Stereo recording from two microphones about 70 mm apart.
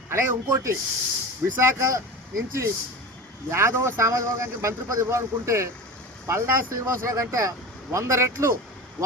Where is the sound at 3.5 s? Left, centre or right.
Right.